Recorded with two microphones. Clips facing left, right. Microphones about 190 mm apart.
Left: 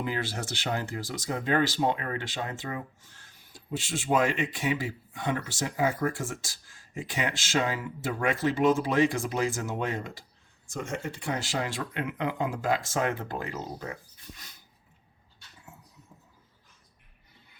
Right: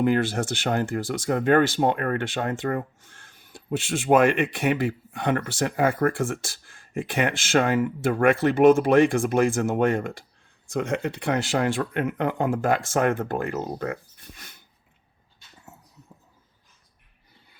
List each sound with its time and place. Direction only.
0.0 s speech: 55° right (ahead or behind)